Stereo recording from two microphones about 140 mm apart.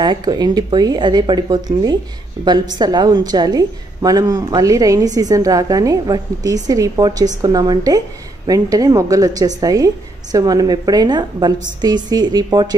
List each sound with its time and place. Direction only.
0.0 s a woman's voice: 30° right (ahead or behind)